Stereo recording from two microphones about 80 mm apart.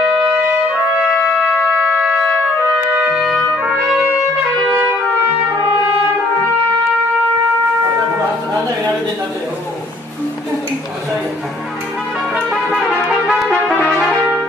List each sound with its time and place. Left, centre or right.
1.3 s shofar: centre
2.0 s trumpet: centre
2.6 s music: right
13.1 s brass instrument: centre